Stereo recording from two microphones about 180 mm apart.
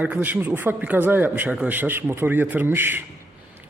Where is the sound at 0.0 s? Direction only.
10° right (ahead or behind).